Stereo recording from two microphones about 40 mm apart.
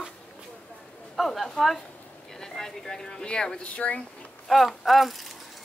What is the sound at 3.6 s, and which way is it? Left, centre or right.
Speech, left.